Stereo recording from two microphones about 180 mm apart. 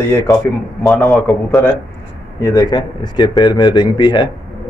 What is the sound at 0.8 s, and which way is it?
A man's voice, 5° left (ahead or behind).